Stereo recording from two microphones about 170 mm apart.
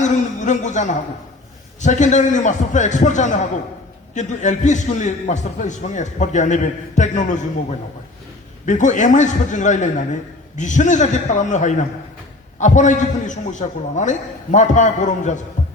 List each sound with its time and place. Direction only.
0.0 s a man's voice: 45° left (ahead or behind)
8.6 s a man's voice: 45° left (ahead or behind)